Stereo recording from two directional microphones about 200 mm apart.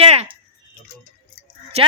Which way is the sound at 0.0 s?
30° right (ahead or behind).